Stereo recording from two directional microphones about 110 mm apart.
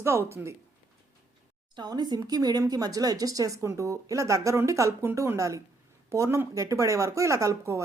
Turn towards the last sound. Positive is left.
turn(degrees=-30)  # may be behind; listen again after turning